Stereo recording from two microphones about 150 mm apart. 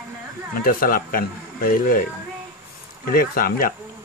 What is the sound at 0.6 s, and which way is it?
Speech, 70° left (ahead or behind).